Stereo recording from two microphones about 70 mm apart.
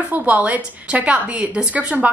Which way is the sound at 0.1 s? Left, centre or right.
Right.